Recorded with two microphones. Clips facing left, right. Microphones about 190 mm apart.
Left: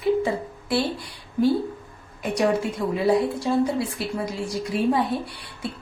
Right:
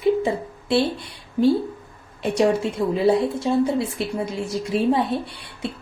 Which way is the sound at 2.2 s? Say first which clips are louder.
Right 3 dB; 25° right (ahead or behind).